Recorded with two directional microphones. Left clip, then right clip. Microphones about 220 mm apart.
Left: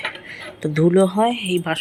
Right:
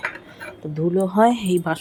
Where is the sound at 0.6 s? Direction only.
10° left (ahead or behind).